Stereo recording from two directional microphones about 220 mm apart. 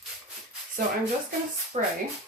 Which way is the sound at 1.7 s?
35° right (ahead or behind).